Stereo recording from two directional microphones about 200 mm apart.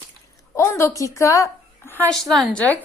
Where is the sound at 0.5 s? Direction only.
15° left (ahead or behind).